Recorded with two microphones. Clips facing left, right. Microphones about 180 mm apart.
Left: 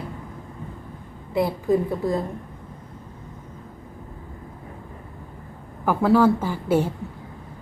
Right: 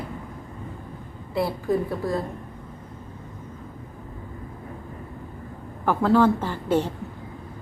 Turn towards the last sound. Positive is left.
turn(degrees=10)  # may be behind; listen again after turning